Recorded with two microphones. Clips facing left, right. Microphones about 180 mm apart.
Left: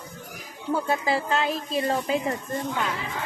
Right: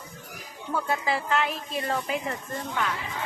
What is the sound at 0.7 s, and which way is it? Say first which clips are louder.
Speech: left 3 dB; 30° left (ahead or behind).